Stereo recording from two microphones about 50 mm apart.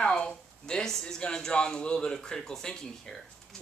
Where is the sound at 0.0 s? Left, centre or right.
Centre.